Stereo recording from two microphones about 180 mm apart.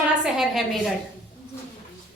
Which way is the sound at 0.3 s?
Centre (ahead or behind).